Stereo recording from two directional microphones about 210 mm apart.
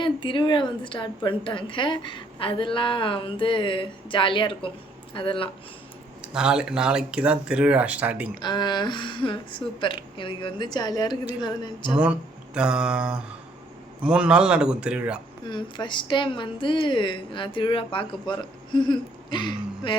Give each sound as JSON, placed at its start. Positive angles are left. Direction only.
{"t": 0.0, "sound": "a woman's voice", "side_deg": 25}
{"t": 6.2, "sound": "speech", "side_deg": -5}
{"t": 8.4, "sound": "a woman's voice", "side_deg": 20}
{"t": 12.5, "sound": "speech", "side_deg": -5}
{"t": 15.4, "sound": "a woman's voice", "side_deg": 20}